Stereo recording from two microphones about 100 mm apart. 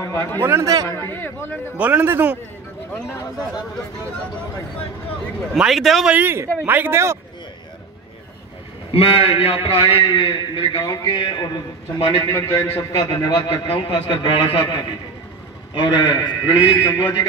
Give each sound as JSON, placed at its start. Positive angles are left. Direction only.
{"t": 0.0, "sound": "speech", "side_deg": 35}
{"t": 0.4, "sound": "speech", "side_deg": -25}
{"t": 1.1, "sound": "a man's voice", "side_deg": 20}
{"t": 1.8, "sound": "a man's voice", "side_deg": -15}
{"t": 5.5, "sound": "a man's voice", "side_deg": -5}
{"t": 6.0, "sound": "speech", "side_deg": -20}
{"t": 8.9, "sound": "a man's voice", "side_deg": 70}
{"t": 12.3, "sound": "speech", "side_deg": 30}
{"t": 13.7, "sound": "a man's voice", "side_deg": 60}